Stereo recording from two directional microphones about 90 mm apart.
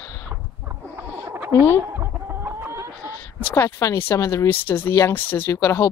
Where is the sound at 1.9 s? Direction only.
20° right (ahead or behind).